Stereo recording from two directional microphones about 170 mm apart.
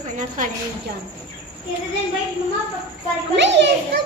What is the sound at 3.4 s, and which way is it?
Speech, 90° right.